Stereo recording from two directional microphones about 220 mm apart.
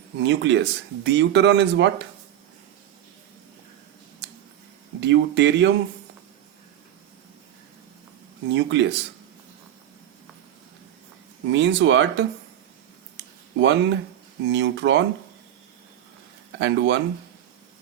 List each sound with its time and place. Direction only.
0.2 s speech: 55° right (ahead or behind)
4.9 s speech: 55° right (ahead or behind)
8.5 s speech: 55° right (ahead or behind)
11.5 s speech: 55° right (ahead or behind)
13.1 s a sound: 55° right (ahead or behind)
14.5 s speech: 55° right (ahead or behind)
16.6 s speech: 55° right (ahead or behind)